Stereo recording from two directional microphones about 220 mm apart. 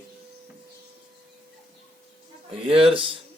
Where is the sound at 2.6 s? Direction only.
25° right (ahead or behind).